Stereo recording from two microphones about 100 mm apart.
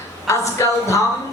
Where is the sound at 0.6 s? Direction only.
30° left (ahead or behind).